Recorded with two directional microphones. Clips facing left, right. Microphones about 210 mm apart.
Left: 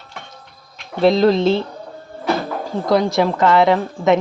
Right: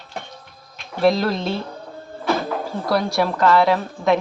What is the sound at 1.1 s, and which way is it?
Speech, 25° left (ahead or behind).